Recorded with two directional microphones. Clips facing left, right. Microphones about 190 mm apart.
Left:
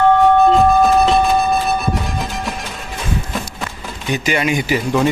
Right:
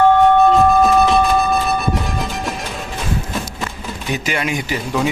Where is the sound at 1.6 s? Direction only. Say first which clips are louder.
Even; centre (ahead or behind).